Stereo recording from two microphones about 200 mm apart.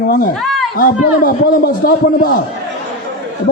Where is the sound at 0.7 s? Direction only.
45° left (ahead or behind).